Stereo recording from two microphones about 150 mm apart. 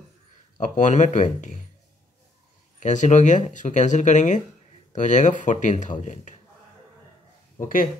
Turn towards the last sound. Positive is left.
turn(degrees=65)  # may be behind; listen again after turning